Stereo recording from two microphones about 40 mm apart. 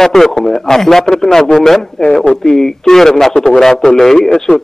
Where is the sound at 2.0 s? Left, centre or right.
Centre.